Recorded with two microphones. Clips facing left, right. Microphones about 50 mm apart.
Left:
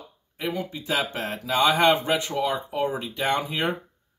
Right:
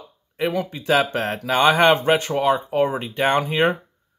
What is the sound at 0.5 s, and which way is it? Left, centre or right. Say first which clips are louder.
Speech: right 6 dB; right.